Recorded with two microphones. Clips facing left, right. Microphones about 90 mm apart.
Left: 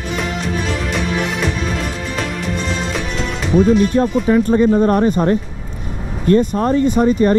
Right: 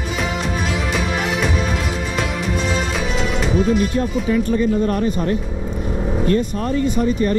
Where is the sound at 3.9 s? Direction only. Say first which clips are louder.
Left 5 dB; 40° left (ahead or behind).